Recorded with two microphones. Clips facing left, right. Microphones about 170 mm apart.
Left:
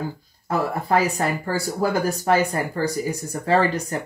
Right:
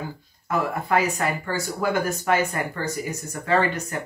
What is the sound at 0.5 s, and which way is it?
Speech, 35° left (ahead or behind).